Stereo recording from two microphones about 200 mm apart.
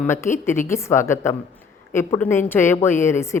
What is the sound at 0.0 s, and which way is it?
A woman's voice, 15° left (ahead or behind).